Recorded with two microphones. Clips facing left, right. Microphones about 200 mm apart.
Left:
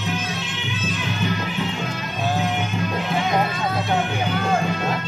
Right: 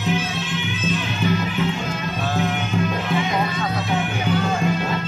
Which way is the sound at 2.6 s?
Centre (ahead or behind).